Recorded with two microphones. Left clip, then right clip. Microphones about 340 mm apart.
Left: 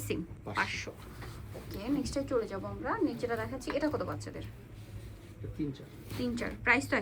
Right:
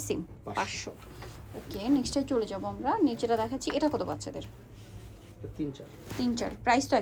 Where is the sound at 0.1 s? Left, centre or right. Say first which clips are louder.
Right 2 dB; centre.